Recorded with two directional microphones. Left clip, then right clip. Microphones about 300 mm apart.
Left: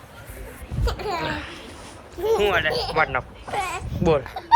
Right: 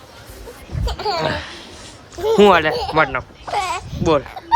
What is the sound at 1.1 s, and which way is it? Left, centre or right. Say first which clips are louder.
Speech: right 6 dB; centre.